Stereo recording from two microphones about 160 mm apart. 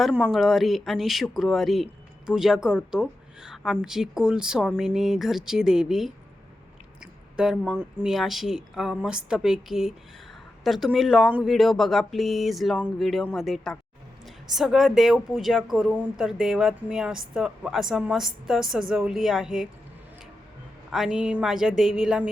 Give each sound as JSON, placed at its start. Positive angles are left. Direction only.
{"t": 0.2, "sound": "speech", "side_deg": 0}
{"t": 20.9, "sound": "speech", "side_deg": -5}